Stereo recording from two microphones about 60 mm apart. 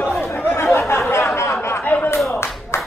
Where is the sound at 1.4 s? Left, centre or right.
Left.